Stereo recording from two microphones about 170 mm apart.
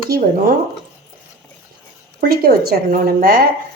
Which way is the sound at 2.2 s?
60° right (ahead or behind).